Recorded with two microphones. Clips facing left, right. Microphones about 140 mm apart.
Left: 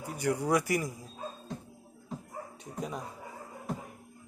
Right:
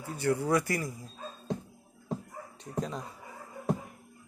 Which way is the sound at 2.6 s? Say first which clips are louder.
Right 4 dB; 10° left (ahead or behind).